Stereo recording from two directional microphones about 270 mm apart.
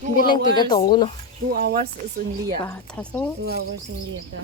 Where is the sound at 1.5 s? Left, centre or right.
Right.